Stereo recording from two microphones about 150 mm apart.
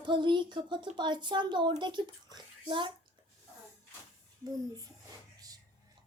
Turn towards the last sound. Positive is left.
turn(degrees=-25)  # may be behind; listen again after turning